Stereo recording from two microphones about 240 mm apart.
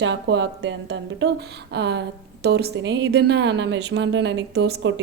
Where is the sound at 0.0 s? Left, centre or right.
Right.